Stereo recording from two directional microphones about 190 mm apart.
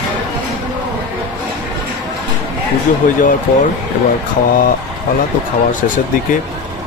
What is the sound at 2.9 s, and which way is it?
Speech, 45° left (ahead or behind).